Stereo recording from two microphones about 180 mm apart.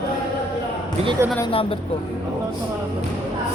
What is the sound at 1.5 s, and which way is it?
Speech, 30° left (ahead or behind).